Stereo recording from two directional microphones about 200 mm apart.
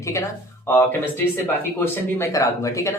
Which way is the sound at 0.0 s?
15° left (ahead or behind).